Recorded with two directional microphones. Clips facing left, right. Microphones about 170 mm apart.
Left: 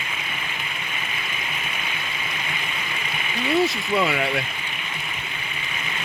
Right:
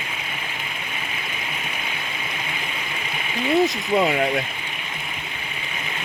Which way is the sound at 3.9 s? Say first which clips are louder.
Right 3 dB; 40° right (ahead or behind).